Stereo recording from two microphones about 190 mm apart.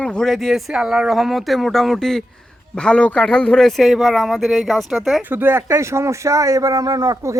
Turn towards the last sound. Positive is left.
turn(degrees=-15)  # may be behind; listen again after turning